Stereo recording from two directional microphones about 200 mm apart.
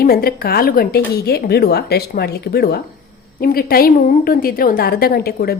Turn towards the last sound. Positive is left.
turn(degrees=50)  # may be behind; listen again after turning